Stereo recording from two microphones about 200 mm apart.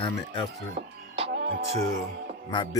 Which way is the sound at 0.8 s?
30° right (ahead or behind).